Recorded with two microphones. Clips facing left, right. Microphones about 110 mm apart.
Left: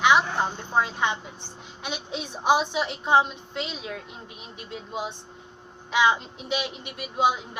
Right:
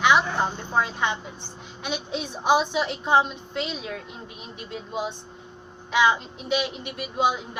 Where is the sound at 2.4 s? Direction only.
10° left (ahead or behind).